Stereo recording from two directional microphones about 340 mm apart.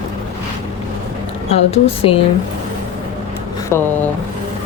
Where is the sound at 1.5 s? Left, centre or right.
Centre.